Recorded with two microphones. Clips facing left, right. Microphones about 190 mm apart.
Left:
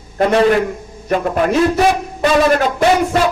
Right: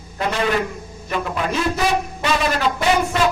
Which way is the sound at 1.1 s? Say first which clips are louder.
Left 8 dB; 45° left (ahead or behind).